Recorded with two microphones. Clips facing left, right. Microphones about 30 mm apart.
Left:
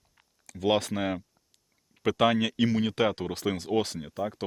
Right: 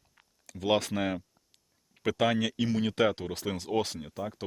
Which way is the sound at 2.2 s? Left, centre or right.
Centre.